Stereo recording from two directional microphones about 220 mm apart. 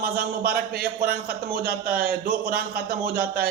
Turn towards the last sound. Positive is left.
turn(degrees=-45)  # may be behind; listen again after turning